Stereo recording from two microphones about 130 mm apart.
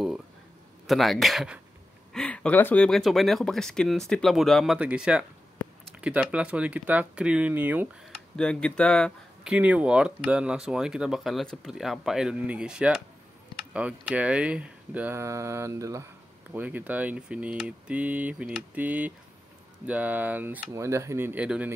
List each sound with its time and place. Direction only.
0.8 s speech: centre (ahead or behind)
2.1 s speech: 10° left (ahead or behind); by 7.9 s 15° right (ahead or behind)
8.4 s speech: 5° left (ahead or behind)
9.4 s speech: 10° right (ahead or behind)